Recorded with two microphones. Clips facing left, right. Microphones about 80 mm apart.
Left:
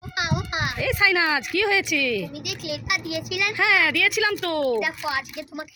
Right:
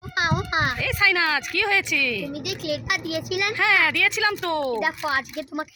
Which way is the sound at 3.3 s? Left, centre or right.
Right.